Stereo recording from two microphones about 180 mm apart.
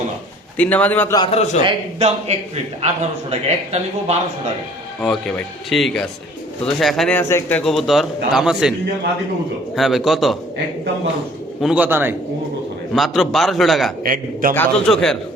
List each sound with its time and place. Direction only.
0.5 s a man's voice: 10° left (ahead or behind)
1.1 s a man's voice: 30° left (ahead or behind)
1.6 s a man's voice: 35° right (ahead or behind)
5.7 s a man's voice: centre (ahead or behind)
7.2 s a man's voice: 15° left (ahead or behind)
7.6 s a man's voice: centre (ahead or behind)
9.7 s a man's voice: centre (ahead or behind)
11.6 s a man's voice: 5° right (ahead or behind)
12.9 s a man's voice: centre (ahead or behind)
14.0 s a man's voice: 50° right (ahead or behind)
14.5 s a man's voice: 5° left (ahead or behind)